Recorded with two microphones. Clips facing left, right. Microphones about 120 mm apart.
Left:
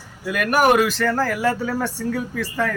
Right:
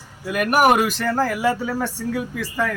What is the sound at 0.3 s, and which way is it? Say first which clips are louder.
Speech: even; 20° right (ahead or behind).